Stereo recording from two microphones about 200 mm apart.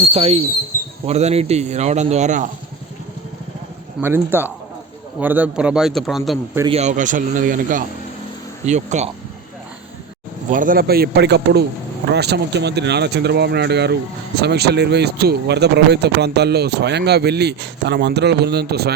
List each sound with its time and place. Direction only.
0.0 s speech: 30° right (ahead or behind)
4.0 s a man's voice: 10° right (ahead or behind)
6.7 s speech: 35° right (ahead or behind)
10.5 s speech: 40° right (ahead or behind)